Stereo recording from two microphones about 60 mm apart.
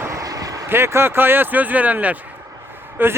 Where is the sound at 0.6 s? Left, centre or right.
Right.